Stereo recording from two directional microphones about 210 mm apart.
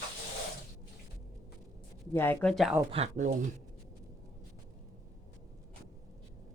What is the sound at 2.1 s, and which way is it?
Speech, 10° left (ahead or behind).